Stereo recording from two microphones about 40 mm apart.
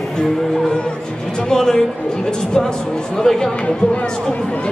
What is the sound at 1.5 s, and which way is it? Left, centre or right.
Speech, centre.